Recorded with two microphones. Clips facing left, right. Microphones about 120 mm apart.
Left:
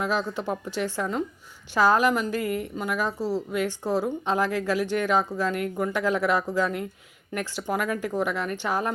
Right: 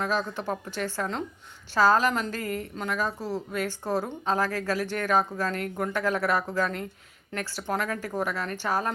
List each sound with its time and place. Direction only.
0.0 s speech: 15° left (ahead or behind)